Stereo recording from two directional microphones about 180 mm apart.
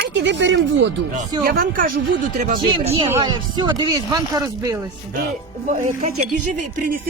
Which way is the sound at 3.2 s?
25° right (ahead or behind).